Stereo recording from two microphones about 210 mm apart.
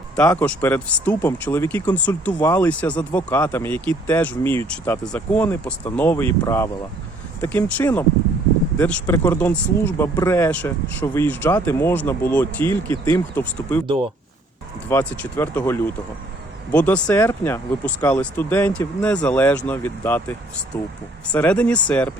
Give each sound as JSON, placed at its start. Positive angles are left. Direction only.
{"t": 0.3, "sound": "speech", "side_deg": 10}
{"t": 13.8, "sound": "speech", "side_deg": -25}
{"t": 14.8, "sound": "speech", "side_deg": 10}